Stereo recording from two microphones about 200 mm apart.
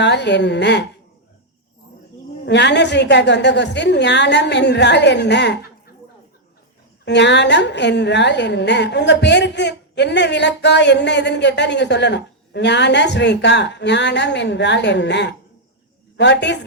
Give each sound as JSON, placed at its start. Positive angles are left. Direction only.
{"t": 0.0, "sound": "a woman's voice", "side_deg": 60}
{"t": 2.5, "sound": "a woman's voice", "side_deg": 60}
{"t": 7.0, "sound": "a woman's voice", "side_deg": 60}